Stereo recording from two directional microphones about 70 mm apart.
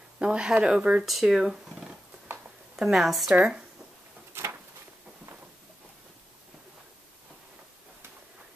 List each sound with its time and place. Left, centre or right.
0.2 s a woman's voice: centre
3.3 s speech: centre
4.3 s a sound: right